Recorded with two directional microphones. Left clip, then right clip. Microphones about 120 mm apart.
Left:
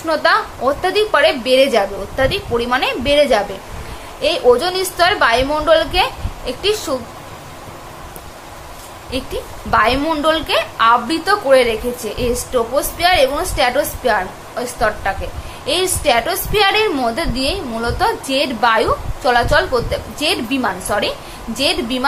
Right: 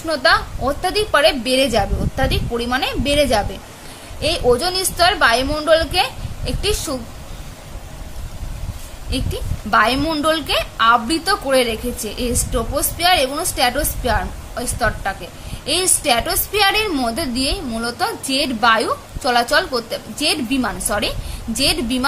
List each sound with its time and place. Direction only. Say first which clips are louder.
0.1 s a woman's voice: left 1 dB; 30° right (ahead or behind)
9.1 s a woman's voice: left 3 dB; 35° right (ahead or behind)